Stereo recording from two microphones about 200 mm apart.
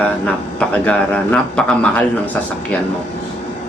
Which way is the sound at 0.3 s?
5° left (ahead or behind).